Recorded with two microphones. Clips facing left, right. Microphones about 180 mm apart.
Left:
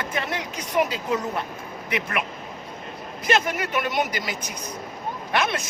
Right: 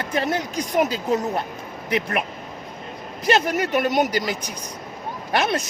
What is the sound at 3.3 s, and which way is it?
Speech, 40° right (ahead or behind).